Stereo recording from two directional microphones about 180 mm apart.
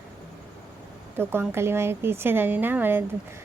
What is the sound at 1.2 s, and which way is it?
Speech, 10° right (ahead or behind).